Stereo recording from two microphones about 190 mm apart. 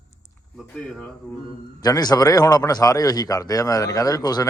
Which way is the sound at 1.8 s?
20° left (ahead or behind).